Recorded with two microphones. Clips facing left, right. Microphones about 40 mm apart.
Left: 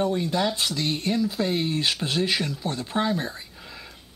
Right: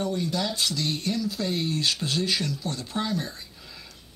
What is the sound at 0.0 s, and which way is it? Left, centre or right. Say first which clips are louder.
Speech: left 4 dB; left.